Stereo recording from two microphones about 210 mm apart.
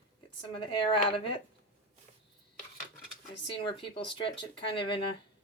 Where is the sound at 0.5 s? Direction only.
25° left (ahead or behind).